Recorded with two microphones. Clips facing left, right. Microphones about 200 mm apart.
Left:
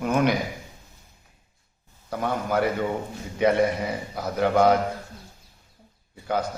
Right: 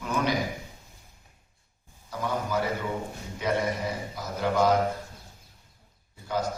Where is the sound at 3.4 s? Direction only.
60° left (ahead or behind).